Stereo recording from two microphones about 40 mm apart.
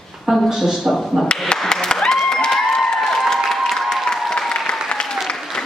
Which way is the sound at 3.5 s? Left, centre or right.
Centre.